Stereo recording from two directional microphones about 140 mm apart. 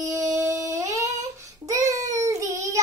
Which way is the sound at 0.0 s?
25° right (ahead or behind).